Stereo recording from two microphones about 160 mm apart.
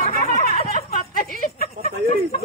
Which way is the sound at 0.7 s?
55° left (ahead or behind).